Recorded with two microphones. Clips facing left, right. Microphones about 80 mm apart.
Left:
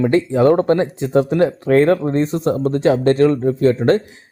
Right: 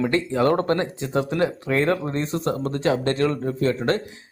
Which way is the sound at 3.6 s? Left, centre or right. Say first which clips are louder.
Left 7 dB; left.